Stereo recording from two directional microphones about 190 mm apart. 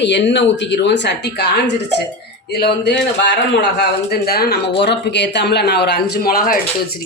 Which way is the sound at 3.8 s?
55° left (ahead or behind).